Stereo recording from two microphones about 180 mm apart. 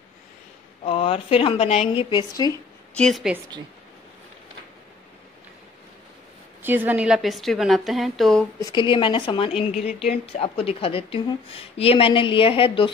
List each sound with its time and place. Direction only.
0.8 s a woman's voice: 30° left (ahead or behind)
2.9 s a woman's voice: 5° left (ahead or behind)
6.6 s a woman's voice: 10° right (ahead or behind)
8.5 s a woman's voice: 25° left (ahead or behind)
9.6 s a woman's voice: 40° left (ahead or behind)